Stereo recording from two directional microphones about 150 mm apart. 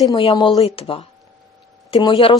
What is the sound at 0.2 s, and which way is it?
Speech, 35° left (ahead or behind).